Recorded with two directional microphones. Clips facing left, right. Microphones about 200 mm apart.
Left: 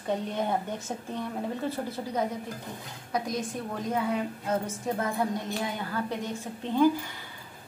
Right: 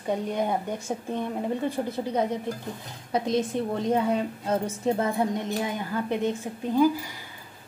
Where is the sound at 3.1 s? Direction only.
25° right (ahead or behind).